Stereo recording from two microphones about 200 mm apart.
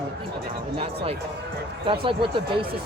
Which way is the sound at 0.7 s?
25° right (ahead or behind).